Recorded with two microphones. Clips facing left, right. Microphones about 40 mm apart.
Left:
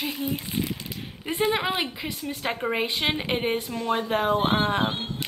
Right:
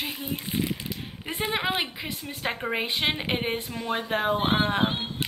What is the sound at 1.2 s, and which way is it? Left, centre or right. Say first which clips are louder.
A woman's voice: left 3 dB; centre.